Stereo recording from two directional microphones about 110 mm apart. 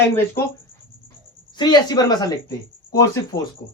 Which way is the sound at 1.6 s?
40° left (ahead or behind).